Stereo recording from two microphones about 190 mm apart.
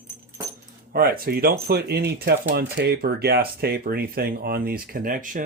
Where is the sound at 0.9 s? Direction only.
50° right (ahead or behind).